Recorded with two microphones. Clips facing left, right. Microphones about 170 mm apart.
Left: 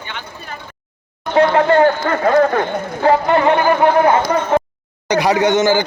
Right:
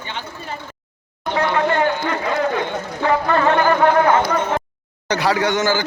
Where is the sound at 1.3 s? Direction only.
35° left (ahead or behind).